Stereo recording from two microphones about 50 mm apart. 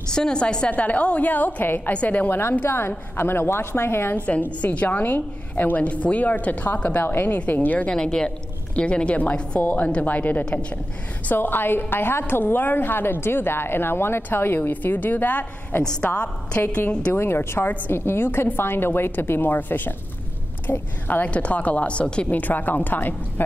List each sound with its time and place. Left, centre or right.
0.1 s a woman's voice: centre
0.7 s a woman's voice: left
2.2 s a woman's voice: left
4.1 s a woman's voice: left
7.9 s a woman's voice: centre
9.6 s a woman's voice: left
11.3 s a woman's voice: left
16.1 s a woman's voice: left
16.6 s a woman's voice: left
20.7 s speech: left
21.1 s a woman's voice: left
22.3 s a woman's voice: left